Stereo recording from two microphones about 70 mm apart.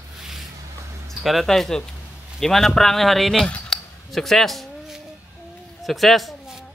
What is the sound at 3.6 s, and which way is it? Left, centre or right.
Cutlery, centre.